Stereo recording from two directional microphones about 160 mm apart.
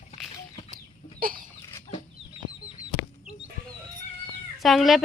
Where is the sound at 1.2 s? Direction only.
60° right (ahead or behind).